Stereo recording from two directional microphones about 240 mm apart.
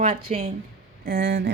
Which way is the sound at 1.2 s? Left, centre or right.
Right.